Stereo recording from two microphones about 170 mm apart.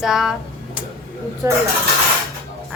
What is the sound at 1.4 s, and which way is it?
Speech, 15° right (ahead or behind).